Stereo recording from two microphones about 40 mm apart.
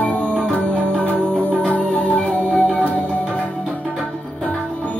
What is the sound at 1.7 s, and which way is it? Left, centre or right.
Music, left.